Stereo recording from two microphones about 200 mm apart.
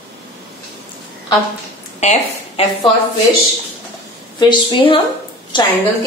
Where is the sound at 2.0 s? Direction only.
35° left (ahead or behind).